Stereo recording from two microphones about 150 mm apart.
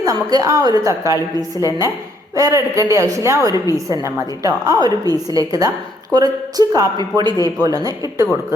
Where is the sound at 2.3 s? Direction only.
20° right (ahead or behind).